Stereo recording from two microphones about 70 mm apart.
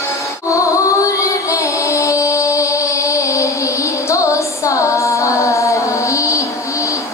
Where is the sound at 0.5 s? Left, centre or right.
Left.